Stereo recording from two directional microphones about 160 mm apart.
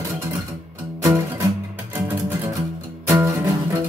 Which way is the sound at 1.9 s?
20° right (ahead or behind).